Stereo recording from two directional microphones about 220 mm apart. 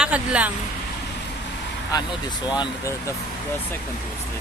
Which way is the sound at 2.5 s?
20° left (ahead or behind).